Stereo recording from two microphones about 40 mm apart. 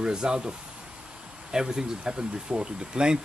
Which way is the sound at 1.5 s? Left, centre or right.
Centre.